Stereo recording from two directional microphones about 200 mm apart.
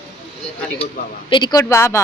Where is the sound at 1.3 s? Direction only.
20° left (ahead or behind).